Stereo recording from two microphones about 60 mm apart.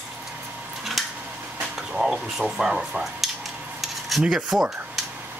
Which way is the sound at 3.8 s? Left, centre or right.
Centre.